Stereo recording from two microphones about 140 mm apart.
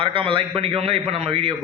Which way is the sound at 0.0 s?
40° right (ahead or behind).